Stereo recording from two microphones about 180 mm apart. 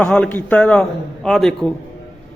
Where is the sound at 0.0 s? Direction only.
10° left (ahead or behind).